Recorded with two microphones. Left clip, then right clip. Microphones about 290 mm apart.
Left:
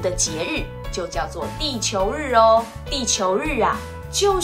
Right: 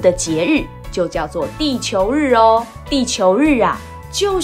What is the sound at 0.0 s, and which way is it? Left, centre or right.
A child's voice, right.